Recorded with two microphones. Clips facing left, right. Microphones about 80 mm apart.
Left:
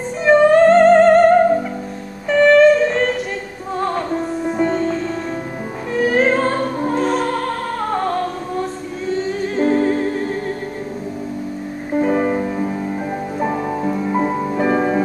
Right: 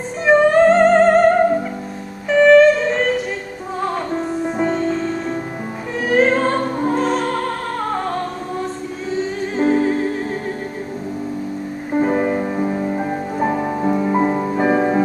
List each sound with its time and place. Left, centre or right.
0.2 s music: centre
4.5 s music: centre
5.9 s music: centre
11.9 s music: centre